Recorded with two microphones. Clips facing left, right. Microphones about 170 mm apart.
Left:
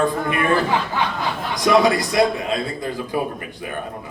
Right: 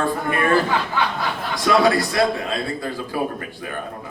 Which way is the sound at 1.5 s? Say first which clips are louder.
Left 1 dB; 20° left (ahead or behind).